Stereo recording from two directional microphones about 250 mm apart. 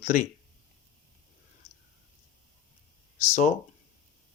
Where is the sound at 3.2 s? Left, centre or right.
Left.